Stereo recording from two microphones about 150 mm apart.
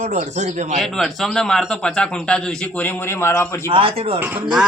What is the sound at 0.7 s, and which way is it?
A man's voice, centre (ahead or behind).